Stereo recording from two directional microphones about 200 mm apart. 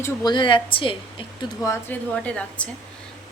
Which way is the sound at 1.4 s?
15° left (ahead or behind).